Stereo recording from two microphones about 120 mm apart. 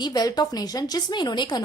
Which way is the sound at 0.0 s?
35° left (ahead or behind).